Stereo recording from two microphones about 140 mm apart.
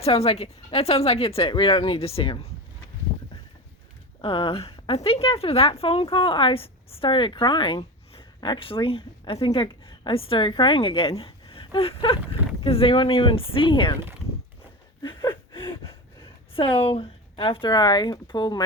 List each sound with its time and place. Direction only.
0.0 s speech: 45° left (ahead or behind)
4.2 s a woman's voice: 40° left (ahead or behind)
15.0 s gasp: 35° left (ahead or behind)
16.6 s a woman's voice: 40° left (ahead or behind)